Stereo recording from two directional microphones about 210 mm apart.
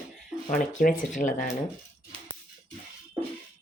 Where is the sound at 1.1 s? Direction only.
40° left (ahead or behind).